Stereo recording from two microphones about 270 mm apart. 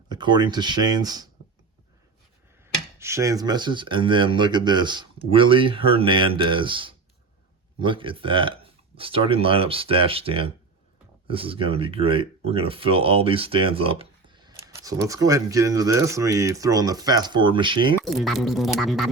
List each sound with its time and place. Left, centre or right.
0.1 s speech: centre
3.0 s speech: centre
17.9 s speech: centre